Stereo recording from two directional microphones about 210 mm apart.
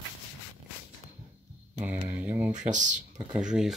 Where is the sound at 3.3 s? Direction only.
5° right (ahead or behind).